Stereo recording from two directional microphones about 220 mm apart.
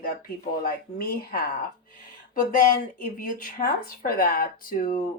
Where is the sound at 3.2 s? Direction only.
40° left (ahead or behind).